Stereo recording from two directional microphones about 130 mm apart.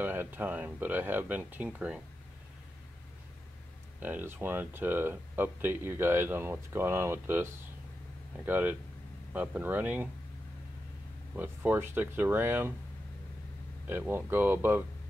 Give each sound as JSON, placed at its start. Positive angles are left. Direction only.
{"t": 0.0, "sound": "speech", "side_deg": -15}
{"t": 4.0, "sound": "speech", "side_deg": -15}
{"t": 8.5, "sound": "speech", "side_deg": -15}
{"t": 11.3, "sound": "speech", "side_deg": -15}
{"t": 13.8, "sound": "speech", "side_deg": -15}